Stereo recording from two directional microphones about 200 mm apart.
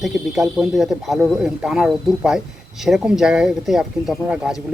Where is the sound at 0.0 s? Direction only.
Centre (ahead or behind).